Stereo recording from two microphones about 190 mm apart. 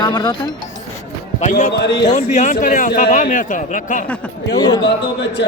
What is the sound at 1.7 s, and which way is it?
Speech, 60° left (ahead or behind).